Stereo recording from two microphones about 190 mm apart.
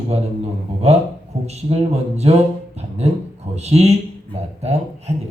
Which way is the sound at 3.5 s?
35° right (ahead or behind).